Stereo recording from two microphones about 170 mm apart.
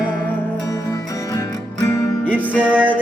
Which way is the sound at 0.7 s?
20° left (ahead or behind).